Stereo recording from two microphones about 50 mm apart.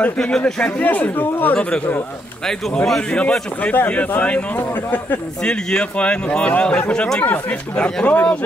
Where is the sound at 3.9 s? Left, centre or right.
Left.